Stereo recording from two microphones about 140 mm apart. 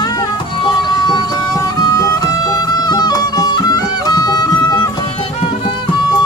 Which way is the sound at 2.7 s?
30° left (ahead or behind).